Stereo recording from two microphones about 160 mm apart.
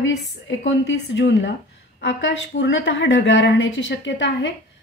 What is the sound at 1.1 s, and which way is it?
A woman's voice, 90° left.